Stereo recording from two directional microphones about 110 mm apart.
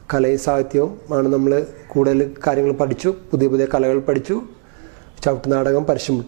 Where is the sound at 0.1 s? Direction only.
15° right (ahead or behind).